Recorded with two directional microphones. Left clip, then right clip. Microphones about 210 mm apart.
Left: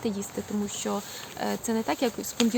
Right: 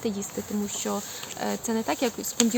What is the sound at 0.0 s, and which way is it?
Speech, 5° right (ahead or behind).